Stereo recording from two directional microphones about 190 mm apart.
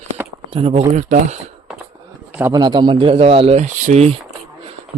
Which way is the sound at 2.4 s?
20° right (ahead or behind).